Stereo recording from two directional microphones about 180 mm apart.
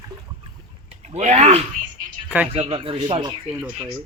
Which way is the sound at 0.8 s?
35° right (ahead or behind).